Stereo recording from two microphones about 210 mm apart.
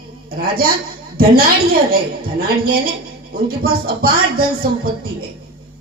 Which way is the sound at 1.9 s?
45° right (ahead or behind).